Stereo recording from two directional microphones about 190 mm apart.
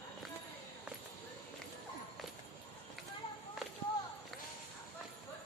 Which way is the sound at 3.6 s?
Centre (ahead or behind).